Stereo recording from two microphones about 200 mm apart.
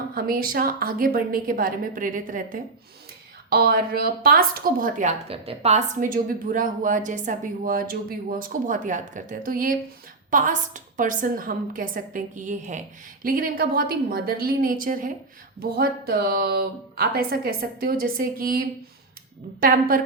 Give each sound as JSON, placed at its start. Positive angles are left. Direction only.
{"t": 0.1, "sound": "a woman's voice", "side_deg": -45}